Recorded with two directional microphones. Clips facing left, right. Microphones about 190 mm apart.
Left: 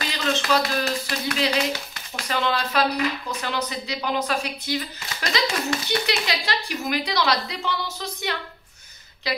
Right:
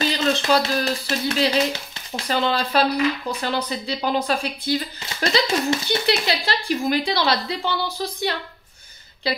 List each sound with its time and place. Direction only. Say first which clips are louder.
0.0 s speech: right 5 dB; 30° right (ahead or behind)